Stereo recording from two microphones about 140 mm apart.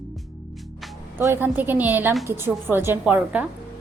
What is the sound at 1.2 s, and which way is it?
A woman's voice, 15° right (ahead or behind).